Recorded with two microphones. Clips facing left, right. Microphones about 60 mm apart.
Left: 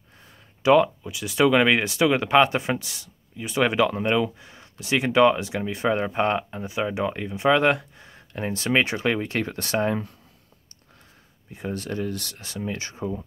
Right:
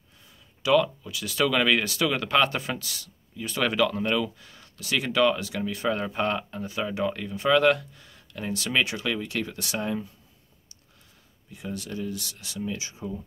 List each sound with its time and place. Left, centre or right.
0.6 s speech: left
11.5 s speech: left